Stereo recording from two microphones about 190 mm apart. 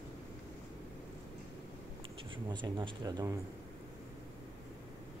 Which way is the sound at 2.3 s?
25° right (ahead or behind).